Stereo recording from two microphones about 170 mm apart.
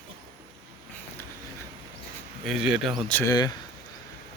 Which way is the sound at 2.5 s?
5° right (ahead or behind).